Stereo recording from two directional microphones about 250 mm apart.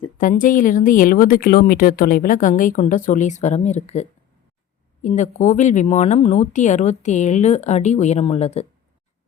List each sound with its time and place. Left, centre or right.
0.2 s a woman's voice: left